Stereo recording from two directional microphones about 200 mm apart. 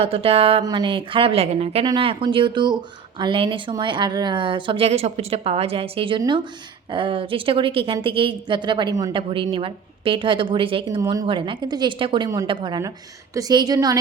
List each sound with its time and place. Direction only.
0.0 s speech: 30° right (ahead or behind)